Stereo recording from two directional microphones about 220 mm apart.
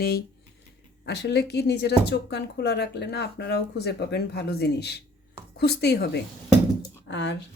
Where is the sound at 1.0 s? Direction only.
50° left (ahead or behind).